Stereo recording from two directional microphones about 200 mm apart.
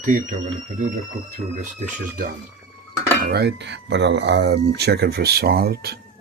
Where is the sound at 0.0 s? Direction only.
40° right (ahead or behind).